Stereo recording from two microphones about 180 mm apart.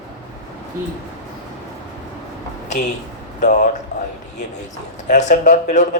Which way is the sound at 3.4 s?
50° left (ahead or behind).